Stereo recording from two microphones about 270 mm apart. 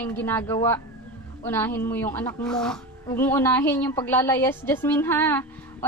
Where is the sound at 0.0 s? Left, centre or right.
Centre.